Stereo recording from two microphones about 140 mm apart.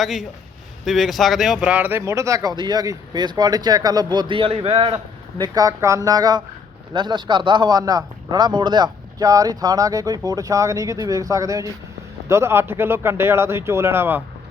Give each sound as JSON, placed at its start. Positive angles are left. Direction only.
{"t": 0.0, "sound": "a man's voice", "side_deg": 0}
{"t": 5.4, "sound": "a man's voice", "side_deg": -25}